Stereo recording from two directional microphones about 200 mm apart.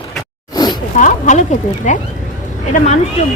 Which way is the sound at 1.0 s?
35° left (ahead or behind).